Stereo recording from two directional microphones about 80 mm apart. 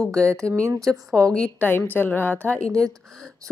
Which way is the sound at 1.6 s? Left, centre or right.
Left.